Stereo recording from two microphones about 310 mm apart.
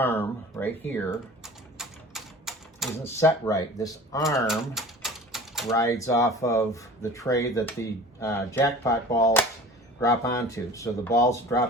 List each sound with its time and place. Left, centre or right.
0.0 s speech: centre
1.8 s typewriter: centre
3.2 s speech: centre
4.2 s typewriter: centre
5.6 s speech: centre